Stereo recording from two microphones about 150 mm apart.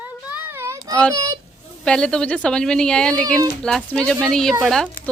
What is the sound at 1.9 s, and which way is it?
Speech, 5° left (ahead or behind).